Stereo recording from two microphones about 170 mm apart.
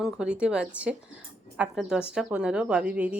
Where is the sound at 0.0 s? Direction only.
5° right (ahead or behind).